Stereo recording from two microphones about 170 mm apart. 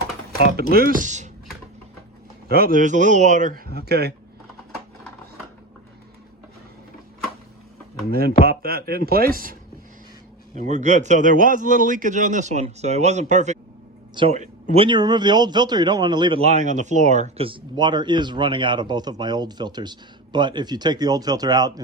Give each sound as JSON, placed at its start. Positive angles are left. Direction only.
{"t": 0.5, "sound": "speech", "side_deg": -65}
{"t": 2.5, "sound": "a man's voice", "side_deg": -60}
{"t": 3.7, "sound": "speech", "side_deg": -70}
{"t": 8.1, "sound": "speech", "side_deg": -65}
{"t": 10.5, "sound": "a man's voice", "side_deg": -45}
{"t": 14.8, "sound": "speech", "side_deg": -25}